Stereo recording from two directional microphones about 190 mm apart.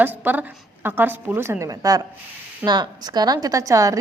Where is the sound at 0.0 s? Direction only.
10° right (ahead or behind).